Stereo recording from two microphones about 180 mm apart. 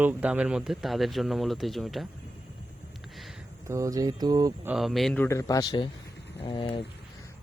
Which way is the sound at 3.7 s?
20° right (ahead or behind).